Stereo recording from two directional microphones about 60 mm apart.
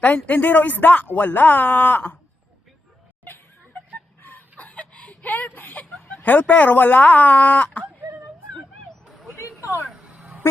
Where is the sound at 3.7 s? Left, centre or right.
Left.